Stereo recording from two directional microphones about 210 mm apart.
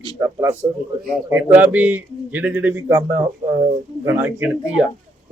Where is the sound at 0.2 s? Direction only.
15° right (ahead or behind).